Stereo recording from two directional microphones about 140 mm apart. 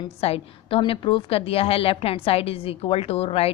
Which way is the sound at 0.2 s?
45° left (ahead or behind).